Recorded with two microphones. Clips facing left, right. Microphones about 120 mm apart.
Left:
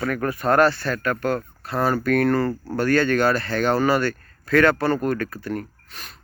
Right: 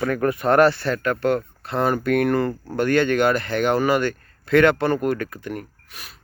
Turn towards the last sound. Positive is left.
turn(degrees=-10)  # may be behind; listen again after turning